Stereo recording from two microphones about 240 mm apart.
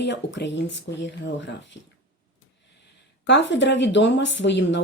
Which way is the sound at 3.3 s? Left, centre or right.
Left.